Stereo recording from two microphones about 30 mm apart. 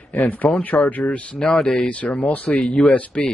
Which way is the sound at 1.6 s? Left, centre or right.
Left.